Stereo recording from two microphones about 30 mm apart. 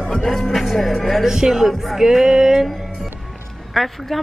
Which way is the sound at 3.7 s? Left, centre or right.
Centre.